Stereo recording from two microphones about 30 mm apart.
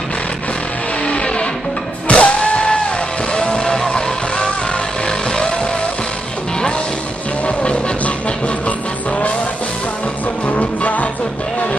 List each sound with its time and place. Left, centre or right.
1.0 s music: left
3.3 s music: left
10.5 s music: left